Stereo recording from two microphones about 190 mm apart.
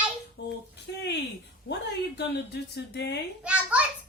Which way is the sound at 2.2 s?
60° left (ahead or behind).